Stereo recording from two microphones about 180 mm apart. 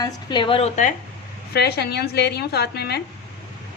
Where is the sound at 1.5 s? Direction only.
65° left (ahead or behind).